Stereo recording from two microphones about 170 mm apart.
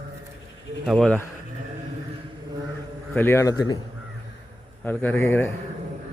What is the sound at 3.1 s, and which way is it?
Speech, 15° left (ahead or behind).